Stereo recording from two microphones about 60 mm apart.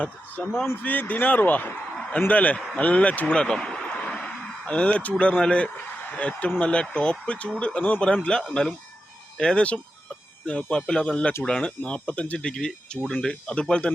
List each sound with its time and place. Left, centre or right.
0.0 s speech: left
2.7 s a sound: left
5.2 s a man's voice: centre
8.0 s speech: centre